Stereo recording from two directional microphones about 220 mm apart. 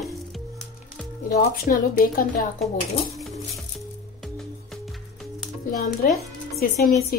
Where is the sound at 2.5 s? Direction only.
Centre (ahead or behind).